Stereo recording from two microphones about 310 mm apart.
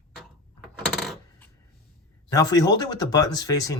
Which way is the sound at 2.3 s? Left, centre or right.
Centre.